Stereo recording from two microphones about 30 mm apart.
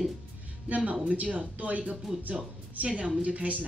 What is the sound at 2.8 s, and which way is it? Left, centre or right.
Speech, right.